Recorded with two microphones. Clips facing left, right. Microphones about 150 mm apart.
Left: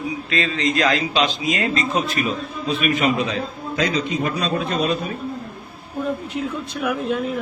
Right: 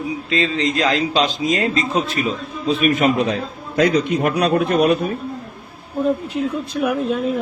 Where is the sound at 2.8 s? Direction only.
45° right (ahead or behind).